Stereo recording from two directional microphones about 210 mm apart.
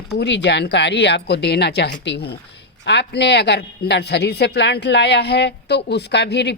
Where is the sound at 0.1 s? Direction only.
55° left (ahead or behind).